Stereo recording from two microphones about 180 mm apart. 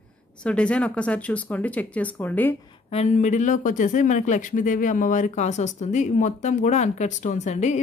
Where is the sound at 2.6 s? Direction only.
30° left (ahead or behind).